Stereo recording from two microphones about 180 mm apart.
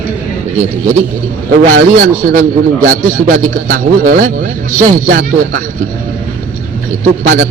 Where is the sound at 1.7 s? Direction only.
55° right (ahead or behind).